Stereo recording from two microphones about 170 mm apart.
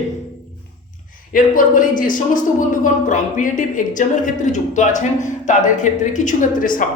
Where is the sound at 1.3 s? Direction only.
50° left (ahead or behind).